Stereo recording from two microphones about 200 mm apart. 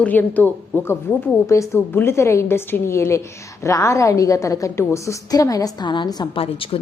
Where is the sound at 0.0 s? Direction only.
10° left (ahead or behind).